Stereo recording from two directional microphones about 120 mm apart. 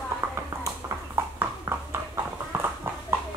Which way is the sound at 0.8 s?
25° right (ahead or behind).